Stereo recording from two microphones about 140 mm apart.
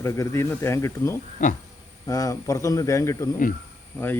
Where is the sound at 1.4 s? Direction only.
70° left (ahead or behind).